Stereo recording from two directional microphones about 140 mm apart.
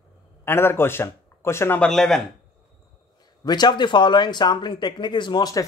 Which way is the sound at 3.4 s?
30° left (ahead or behind).